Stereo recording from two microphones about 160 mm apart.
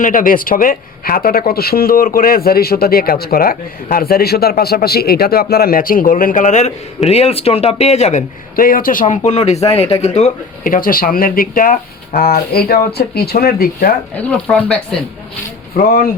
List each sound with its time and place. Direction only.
0.0 s speech: 55° left (ahead or behind)
8.5 s speech: 60° left (ahead or behind)
14.2 s speech: 5° left (ahead or behind)
15.7 s speech: 65° left (ahead or behind)